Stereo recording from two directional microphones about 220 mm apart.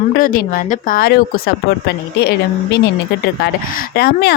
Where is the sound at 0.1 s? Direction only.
40° left (ahead or behind).